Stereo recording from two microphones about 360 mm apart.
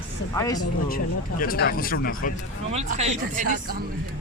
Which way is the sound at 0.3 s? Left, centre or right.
Centre.